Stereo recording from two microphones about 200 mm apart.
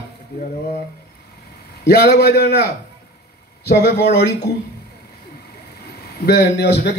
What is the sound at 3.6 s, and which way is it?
Speech, 55° left (ahead or behind).